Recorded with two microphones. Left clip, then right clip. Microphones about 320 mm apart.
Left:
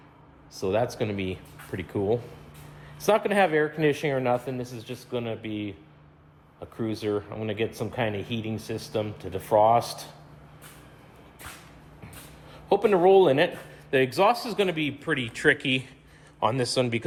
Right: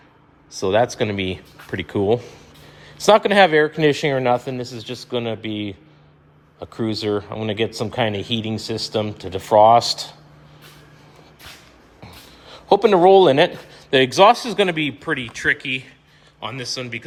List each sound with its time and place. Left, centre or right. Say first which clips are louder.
0.5 s speech: right 8 dB; right
12.0 s writing: right 6 dB; right
13.9 s speech: right 9 dB; right; by 17.0 s centre